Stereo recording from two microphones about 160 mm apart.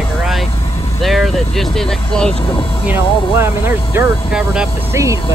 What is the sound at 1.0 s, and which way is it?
Vehicle, centre (ahead or behind).